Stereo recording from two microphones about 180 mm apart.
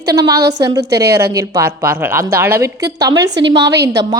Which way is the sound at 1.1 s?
15° right (ahead or behind).